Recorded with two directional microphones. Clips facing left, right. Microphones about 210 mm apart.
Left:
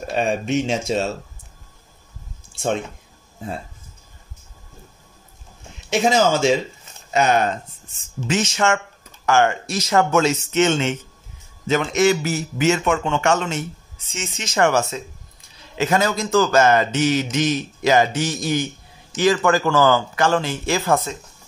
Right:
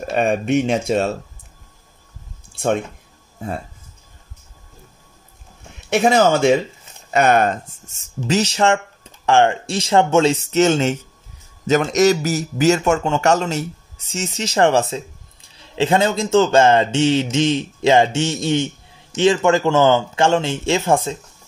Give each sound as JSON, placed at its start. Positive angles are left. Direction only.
{"t": 0.1, "sound": "speech", "side_deg": -60}
{"t": 3.4, "sound": "speech", "side_deg": -60}
{"t": 5.9, "sound": "speech", "side_deg": -60}
{"t": 8.3, "sound": "a man's voice", "side_deg": -35}